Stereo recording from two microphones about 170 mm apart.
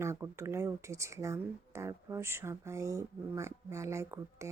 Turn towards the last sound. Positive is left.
turn(degrees=-15)  # may be behind; listen again after turning